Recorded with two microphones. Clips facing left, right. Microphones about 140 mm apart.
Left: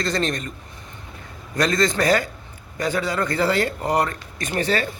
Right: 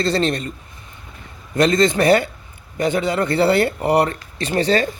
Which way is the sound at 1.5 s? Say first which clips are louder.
Right 5 dB; 25° right (ahead or behind).